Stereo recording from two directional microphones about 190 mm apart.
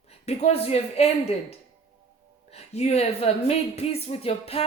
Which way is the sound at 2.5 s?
35° left (ahead or behind).